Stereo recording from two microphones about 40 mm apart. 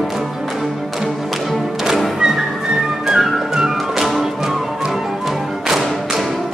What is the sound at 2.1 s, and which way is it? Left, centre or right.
Music, centre.